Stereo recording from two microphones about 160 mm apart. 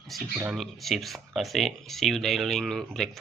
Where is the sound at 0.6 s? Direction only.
Centre (ahead or behind).